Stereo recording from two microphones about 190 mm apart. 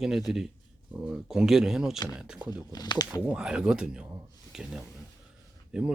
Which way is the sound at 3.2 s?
5° right (ahead or behind).